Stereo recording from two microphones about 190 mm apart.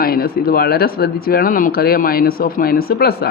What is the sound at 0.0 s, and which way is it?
Speech, 50° left (ahead or behind).